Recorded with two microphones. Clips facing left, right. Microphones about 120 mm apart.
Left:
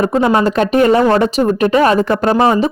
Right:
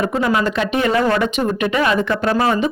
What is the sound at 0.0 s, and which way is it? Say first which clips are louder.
Speech: left 5 dB; 30° left (ahead or behind).